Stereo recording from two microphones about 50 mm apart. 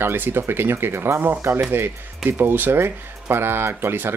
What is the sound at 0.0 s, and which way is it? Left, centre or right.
Speech, right.